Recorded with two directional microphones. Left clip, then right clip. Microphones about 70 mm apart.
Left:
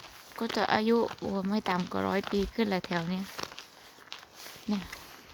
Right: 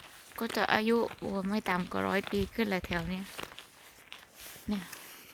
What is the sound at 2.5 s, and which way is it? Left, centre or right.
Speech, left.